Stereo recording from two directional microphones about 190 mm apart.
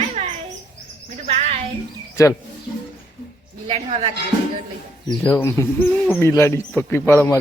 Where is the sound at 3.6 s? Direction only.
30° right (ahead or behind).